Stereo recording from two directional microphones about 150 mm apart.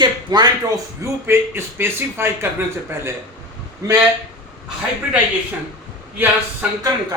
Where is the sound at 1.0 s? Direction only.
15° right (ahead or behind).